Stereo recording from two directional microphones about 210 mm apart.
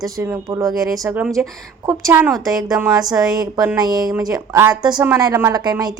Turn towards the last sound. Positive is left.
turn(degrees=-20)  # may be behind; listen again after turning